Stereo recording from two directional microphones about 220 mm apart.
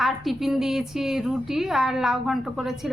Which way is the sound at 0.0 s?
Centre (ahead or behind).